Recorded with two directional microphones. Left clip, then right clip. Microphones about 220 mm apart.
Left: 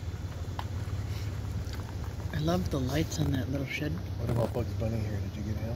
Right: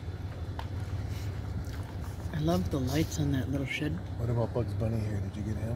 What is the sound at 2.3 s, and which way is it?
Speech, 10° right (ahead or behind).